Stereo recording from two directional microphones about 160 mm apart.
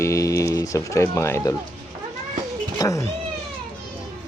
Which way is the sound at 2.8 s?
20° left (ahead or behind).